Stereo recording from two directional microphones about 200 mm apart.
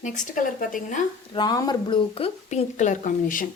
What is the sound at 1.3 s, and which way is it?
Speech, 20° left (ahead or behind).